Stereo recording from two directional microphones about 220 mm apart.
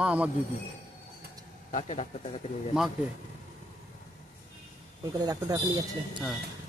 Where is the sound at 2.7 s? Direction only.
5° right (ahead or behind).